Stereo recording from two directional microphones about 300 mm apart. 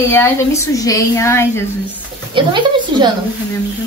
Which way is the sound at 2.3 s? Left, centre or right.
Centre.